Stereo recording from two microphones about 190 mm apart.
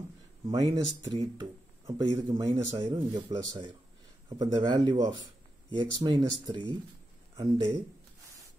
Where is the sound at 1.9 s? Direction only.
25° right (ahead or behind).